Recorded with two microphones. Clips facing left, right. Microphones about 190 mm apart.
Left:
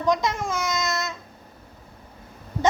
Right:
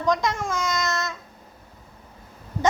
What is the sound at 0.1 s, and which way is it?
Speech, 10° left (ahead or behind).